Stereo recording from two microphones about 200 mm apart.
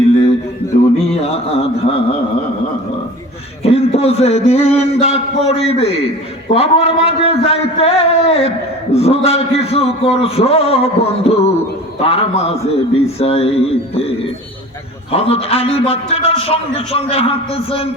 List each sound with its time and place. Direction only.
1.2 s a man's voice: 30° left (ahead or behind)
3.6 s a man's voice: 30° left (ahead or behind)
15.1 s a man's voice: 30° left (ahead or behind)